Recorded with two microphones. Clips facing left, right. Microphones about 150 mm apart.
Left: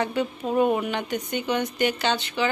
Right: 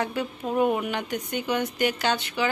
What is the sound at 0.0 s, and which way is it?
A woman's voice, 5° right (ahead or behind).